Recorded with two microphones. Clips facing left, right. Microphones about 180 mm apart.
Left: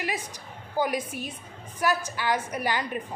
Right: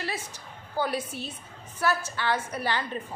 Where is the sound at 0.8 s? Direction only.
10° left (ahead or behind).